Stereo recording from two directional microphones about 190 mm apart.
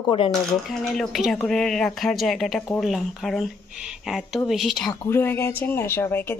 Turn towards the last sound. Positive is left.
turn(degrees=10)  # may be behind; listen again after turning